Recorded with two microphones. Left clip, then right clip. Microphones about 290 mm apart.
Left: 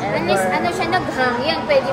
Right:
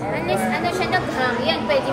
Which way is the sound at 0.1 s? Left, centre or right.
Left.